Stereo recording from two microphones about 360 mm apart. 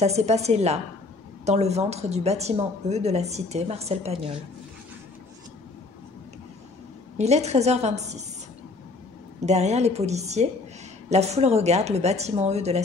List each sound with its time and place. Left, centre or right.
0.0 s a woman's voice: centre
7.2 s a woman's voice: centre
9.5 s a woman's voice: centre